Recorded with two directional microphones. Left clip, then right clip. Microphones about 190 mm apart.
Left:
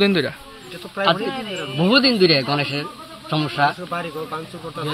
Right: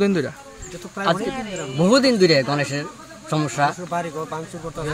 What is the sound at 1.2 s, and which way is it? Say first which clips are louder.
Speech: left 1 dB; 10° left (ahead or behind).